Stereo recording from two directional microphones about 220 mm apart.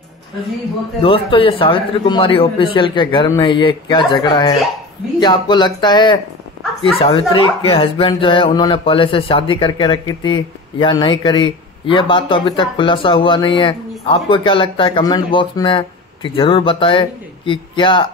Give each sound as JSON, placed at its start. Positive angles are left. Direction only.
{"t": 1.0, "sound": "speech", "side_deg": 25}